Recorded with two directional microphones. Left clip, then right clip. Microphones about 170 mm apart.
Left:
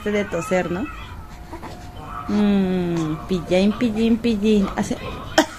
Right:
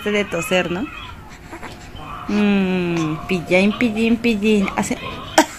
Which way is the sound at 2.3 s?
15° right (ahead or behind).